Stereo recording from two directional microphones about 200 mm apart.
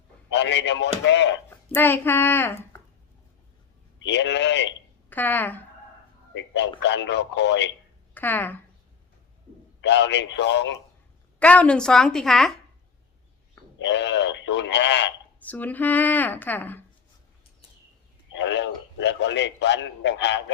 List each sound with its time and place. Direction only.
0.3 s a man's voice: 60° left (ahead or behind)
1.5 s speech: 10° left (ahead or behind)
4.0 s a man's voice: 60° left (ahead or behind)
5.0 s speech: 10° left (ahead or behind)
6.3 s a man's voice: 60° left (ahead or behind)
8.1 s speech: 10° left (ahead or behind)
9.8 s a man's voice: 60° left (ahead or behind)
11.3 s a woman's voice: 5° left (ahead or behind)
13.7 s a man's voice: 60° left (ahead or behind)
15.4 s speech: 10° left (ahead or behind)
18.3 s a man's voice: 65° left (ahead or behind)